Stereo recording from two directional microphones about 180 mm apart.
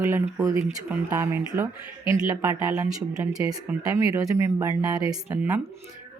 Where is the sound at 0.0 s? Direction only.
15° right (ahead or behind).